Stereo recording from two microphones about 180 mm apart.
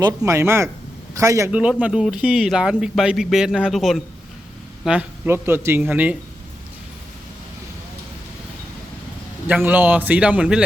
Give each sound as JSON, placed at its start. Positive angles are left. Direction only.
{"t": 0.3, "sound": "speech", "side_deg": -15}
{"t": 1.5, "sound": "speech", "side_deg": -5}
{"t": 9.5, "sound": "speech", "side_deg": -10}